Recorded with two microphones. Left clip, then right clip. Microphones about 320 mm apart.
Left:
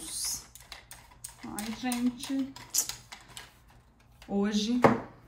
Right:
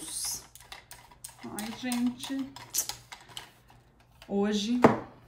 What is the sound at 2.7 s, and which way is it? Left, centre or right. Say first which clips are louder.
Typing: left 1 dB; centre.